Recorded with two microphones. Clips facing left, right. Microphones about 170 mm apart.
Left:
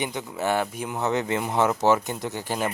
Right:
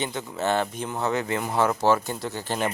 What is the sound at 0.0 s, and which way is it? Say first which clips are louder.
Speech: even; 15° left (ahead or behind).